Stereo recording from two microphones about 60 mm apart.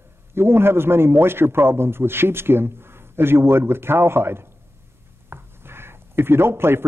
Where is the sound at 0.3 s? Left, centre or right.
Right.